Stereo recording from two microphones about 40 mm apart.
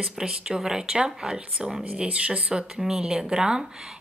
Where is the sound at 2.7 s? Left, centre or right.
Centre.